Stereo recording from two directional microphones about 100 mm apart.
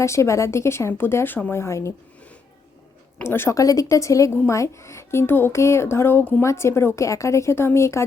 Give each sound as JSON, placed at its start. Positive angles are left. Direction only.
{"t": 0.0, "sound": "speech", "side_deg": 30}
{"t": 1.6, "sound": "speech", "side_deg": 30}
{"t": 3.2, "sound": "a woman's voice", "side_deg": 25}
{"t": 6.4, "sound": "speech", "side_deg": 30}